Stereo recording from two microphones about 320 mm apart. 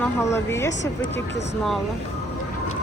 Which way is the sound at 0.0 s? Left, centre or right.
Centre.